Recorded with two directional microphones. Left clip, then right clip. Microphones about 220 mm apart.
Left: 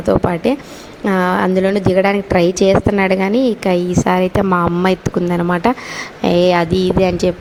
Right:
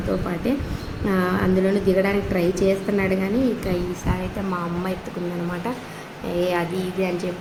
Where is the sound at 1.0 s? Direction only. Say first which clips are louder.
Left 8 dB; 35° left (ahead or behind).